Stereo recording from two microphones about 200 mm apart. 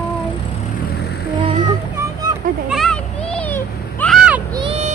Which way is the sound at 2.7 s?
Centre (ahead or behind).